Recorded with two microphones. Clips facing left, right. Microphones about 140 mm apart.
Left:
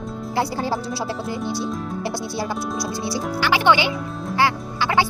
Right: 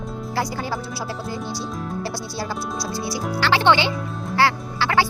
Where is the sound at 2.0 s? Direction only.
20° left (ahead or behind).